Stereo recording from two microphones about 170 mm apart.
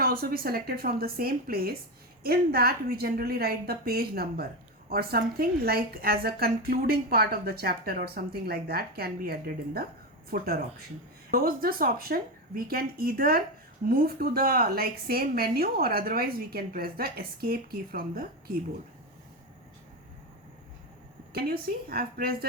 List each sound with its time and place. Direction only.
0.0 s a woman's voice: 60° right (ahead or behind)
21.3 s a woman's voice: 60° right (ahead or behind)